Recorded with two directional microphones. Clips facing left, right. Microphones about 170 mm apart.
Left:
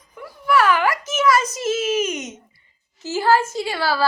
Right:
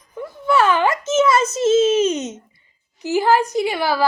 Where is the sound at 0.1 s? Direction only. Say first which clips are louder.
Right 1 dB; 25° right (ahead or behind).